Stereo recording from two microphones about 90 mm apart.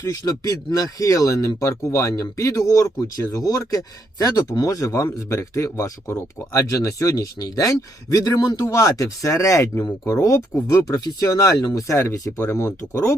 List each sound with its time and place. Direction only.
0.0 s speech: 35° left (ahead or behind)
8.6 s speech: 35° left (ahead or behind)